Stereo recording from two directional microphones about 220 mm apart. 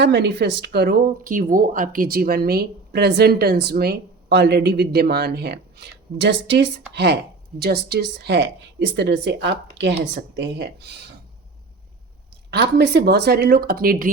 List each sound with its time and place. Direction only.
0.0 s speech: 50° right (ahead or behind)
12.5 s speech: 50° right (ahead or behind)